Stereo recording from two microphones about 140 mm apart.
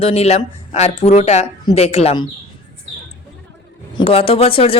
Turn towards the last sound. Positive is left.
turn(degrees=40)  # may be behind; listen again after turning